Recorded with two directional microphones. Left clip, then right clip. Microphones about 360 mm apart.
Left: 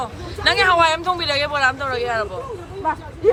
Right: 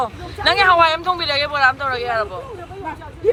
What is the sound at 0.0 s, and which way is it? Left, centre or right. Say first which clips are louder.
Speech: right 2 dB; centre.